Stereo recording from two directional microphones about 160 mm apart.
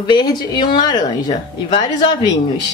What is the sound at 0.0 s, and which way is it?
Speech, 25° left (ahead or behind).